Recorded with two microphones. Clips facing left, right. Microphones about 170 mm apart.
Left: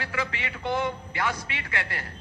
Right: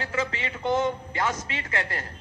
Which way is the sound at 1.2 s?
40° right (ahead or behind).